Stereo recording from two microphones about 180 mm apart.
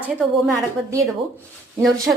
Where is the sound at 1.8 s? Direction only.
Centre (ahead or behind).